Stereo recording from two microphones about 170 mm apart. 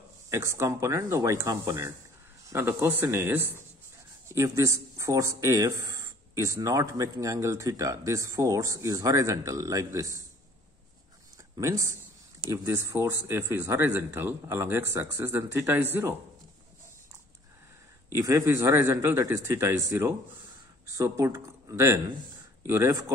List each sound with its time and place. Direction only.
0.3 s speech: 15° right (ahead or behind)
11.5 s a man's voice: 20° right (ahead or behind)
18.1 s speech: 20° right (ahead or behind)